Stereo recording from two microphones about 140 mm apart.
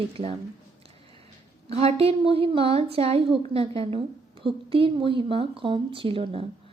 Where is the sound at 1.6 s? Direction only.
45° right (ahead or behind).